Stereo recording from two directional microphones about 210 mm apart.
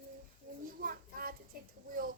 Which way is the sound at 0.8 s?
45° right (ahead or behind).